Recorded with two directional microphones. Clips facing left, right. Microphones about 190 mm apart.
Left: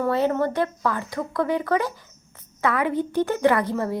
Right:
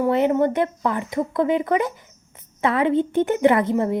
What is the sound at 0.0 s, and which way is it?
A woman's voice, 20° right (ahead or behind).